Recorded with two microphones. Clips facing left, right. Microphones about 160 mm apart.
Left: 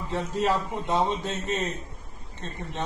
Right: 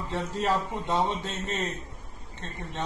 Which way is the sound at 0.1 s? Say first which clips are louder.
Left 2 dB; 15° left (ahead or behind).